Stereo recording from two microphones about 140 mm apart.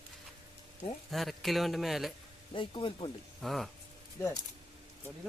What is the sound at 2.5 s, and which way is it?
Speech, 35° left (ahead or behind).